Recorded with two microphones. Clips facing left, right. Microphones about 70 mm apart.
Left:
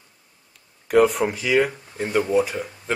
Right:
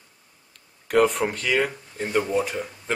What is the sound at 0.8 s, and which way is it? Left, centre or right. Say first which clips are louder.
Speech: left 3 dB; centre.